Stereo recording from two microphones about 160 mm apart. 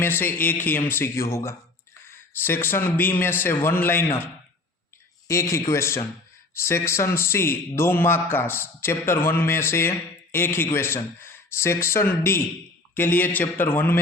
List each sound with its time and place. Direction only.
0.0 s a man's voice: 10° left (ahead or behind)
5.3 s a man's voice: 20° left (ahead or behind)